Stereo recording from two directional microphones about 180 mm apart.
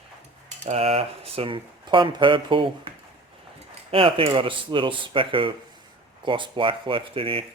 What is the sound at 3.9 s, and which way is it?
Speech, 30° right (ahead or behind).